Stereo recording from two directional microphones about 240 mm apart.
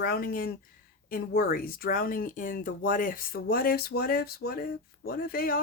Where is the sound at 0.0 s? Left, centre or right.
Left.